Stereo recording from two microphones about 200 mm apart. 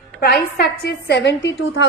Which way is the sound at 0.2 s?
50° left (ahead or behind).